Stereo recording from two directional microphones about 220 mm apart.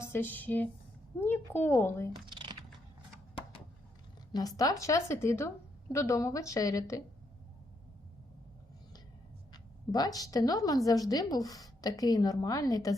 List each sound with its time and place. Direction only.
0.0 s a woman's voice: 10° left (ahead or behind)
2.1 s typing: 20° right (ahead or behind)
4.3 s a woman's voice: 15° left (ahead or behind)
9.5 s a woman's voice: 15° left (ahead or behind)